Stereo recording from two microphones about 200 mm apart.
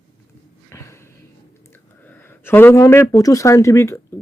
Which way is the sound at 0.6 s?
15° left (ahead or behind).